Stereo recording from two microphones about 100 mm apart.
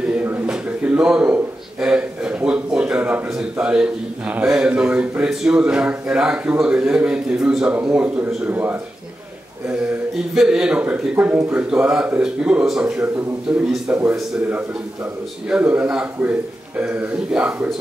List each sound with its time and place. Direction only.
0.1 s speech: 15° right (ahead or behind)
10.3 s a man's voice: 5° right (ahead or behind)
15.5 s a man's voice: 15° right (ahead or behind)